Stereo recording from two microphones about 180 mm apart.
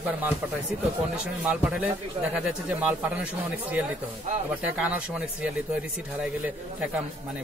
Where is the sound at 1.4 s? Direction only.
10° right (ahead or behind).